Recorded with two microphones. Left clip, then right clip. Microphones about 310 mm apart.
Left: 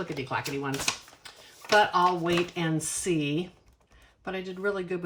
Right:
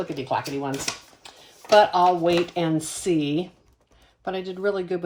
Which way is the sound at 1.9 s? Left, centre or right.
Centre.